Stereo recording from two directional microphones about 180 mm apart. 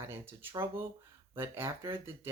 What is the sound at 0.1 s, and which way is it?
Speech, 15° right (ahead or behind).